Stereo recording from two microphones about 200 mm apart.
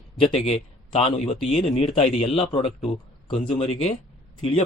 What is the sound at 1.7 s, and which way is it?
Speech, 25° left (ahead or behind).